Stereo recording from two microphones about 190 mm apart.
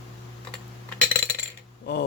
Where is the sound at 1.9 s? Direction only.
60° left (ahead or behind).